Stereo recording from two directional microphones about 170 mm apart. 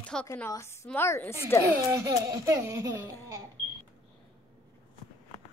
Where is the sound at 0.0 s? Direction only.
10° left (ahead or behind).